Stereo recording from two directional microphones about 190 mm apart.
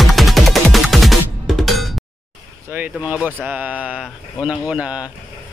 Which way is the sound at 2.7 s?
10° right (ahead or behind).